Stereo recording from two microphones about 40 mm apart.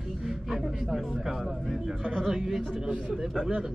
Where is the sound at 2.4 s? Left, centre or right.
Centre.